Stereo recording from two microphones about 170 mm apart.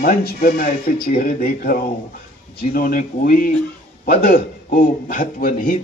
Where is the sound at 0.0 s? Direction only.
60° left (ahead or behind).